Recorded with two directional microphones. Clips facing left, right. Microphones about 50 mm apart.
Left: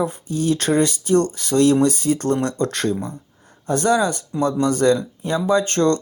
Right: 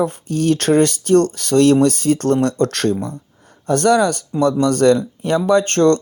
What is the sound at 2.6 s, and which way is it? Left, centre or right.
Speech, right.